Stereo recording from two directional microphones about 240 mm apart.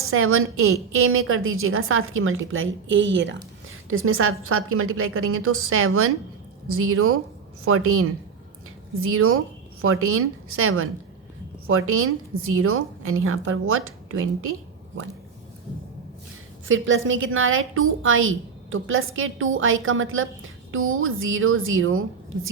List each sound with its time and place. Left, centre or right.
0.0 s a woman's voice: right
16.6 s a woman's voice: right